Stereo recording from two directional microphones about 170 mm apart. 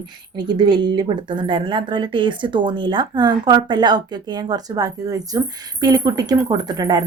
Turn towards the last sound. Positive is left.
turn(degrees=-25)  # may be behind; listen again after turning